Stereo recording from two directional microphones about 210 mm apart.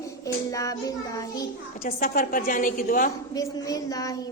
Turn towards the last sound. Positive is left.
turn(degrees=15)  # may be behind; listen again after turning